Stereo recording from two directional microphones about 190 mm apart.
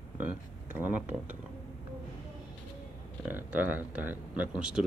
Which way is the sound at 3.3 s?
10° right (ahead or behind).